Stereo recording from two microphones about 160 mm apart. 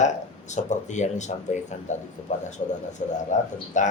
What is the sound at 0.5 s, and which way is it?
Speech, 50° left (ahead or behind).